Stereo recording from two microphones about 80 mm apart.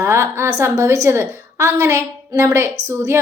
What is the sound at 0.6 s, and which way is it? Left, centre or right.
A woman's voice, right.